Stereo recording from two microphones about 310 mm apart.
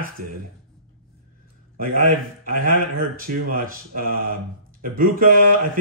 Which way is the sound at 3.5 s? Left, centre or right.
Right.